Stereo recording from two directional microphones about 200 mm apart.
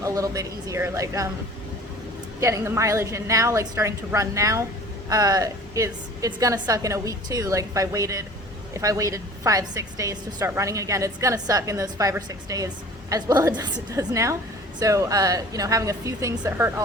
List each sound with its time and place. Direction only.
0.0 s a woman's voice: 15° right (ahead or behind)
2.4 s a woman's voice: 15° right (ahead or behind)